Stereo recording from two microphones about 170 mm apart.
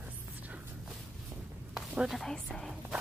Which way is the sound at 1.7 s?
5° right (ahead or behind).